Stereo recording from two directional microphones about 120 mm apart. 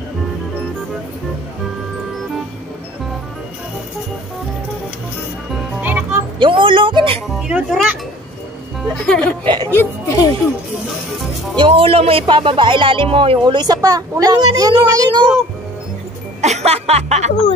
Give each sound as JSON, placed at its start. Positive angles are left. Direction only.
{"t": 5.8, "sound": "music", "side_deg": -15}
{"t": 6.4, "sound": "speech", "side_deg": -45}
{"t": 7.2, "sound": "a child's voice", "side_deg": -5}
{"t": 8.8, "sound": "speech", "side_deg": 5}
{"t": 9.4, "sound": "speech", "side_deg": -45}
{"t": 9.8, "sound": "speech", "side_deg": 25}
{"t": 11.5, "sound": "speech", "side_deg": -45}
{"t": 16.3, "sound": "music", "side_deg": -70}